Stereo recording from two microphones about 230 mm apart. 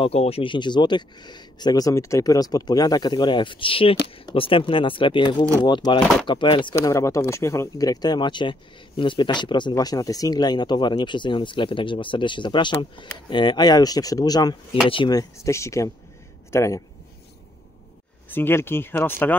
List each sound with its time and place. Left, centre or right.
0.0 s speech: left
18.3 s speech: centre